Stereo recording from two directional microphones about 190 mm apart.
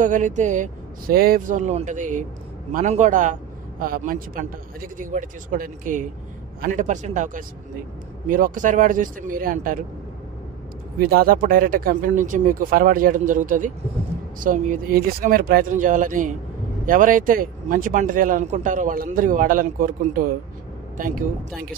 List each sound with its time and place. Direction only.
0.0 s speech: 40° right (ahead or behind)
11.0 s speech: 50° right (ahead or behind)